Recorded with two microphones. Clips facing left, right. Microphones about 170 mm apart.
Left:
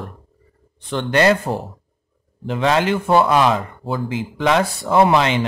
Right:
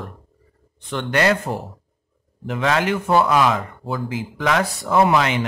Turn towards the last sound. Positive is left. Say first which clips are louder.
# left 2 dB
turn(degrees=30)  # may be behind; listen again after turning